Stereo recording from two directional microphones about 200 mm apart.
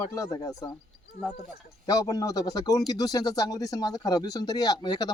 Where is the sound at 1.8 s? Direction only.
20° left (ahead or behind).